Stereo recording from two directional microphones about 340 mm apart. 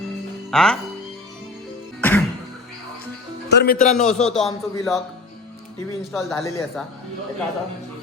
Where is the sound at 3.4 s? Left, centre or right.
Left.